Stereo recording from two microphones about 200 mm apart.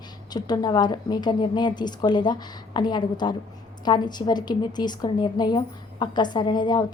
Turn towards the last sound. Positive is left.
turn(degrees=20)  # may be behind; listen again after turning